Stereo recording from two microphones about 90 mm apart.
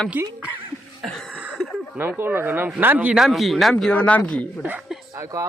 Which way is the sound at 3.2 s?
Centre (ahead or behind).